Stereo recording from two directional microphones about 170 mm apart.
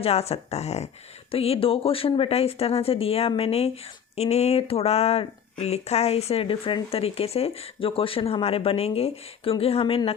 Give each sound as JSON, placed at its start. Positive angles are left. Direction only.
{"t": 0.0, "sound": "speech", "side_deg": 35}